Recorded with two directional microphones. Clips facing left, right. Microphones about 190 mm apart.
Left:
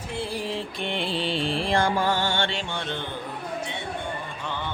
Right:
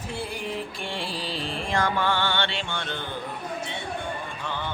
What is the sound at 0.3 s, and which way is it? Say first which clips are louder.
Music: left 2 dB; 25° left (ahead or behind).